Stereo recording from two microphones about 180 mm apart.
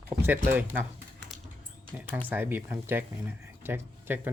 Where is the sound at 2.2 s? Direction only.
10° right (ahead or behind).